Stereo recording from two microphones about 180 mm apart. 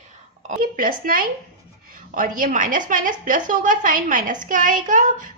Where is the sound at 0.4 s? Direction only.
50° right (ahead or behind).